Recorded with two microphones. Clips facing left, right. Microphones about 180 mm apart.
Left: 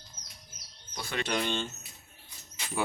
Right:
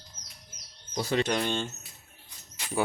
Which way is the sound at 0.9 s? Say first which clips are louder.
Right 8 dB; 35° right (ahead or behind).